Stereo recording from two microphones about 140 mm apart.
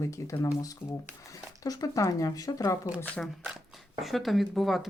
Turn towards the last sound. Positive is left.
turn(degrees=0)  # may be behind; listen again after turning